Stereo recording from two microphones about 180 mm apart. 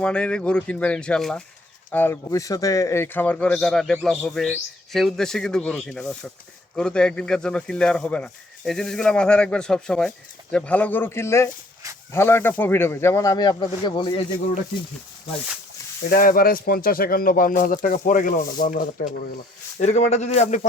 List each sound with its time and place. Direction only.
0.0 s a man's voice: 5° left (ahead or behind); by 14.2 s 25° left (ahead or behind)
16.0 s a man's voice: 50° left (ahead or behind)